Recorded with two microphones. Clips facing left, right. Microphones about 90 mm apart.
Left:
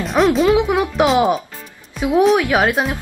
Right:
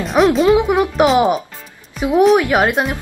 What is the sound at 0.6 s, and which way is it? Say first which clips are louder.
A woman's voice: right 2 dB; 15° right (ahead or behind).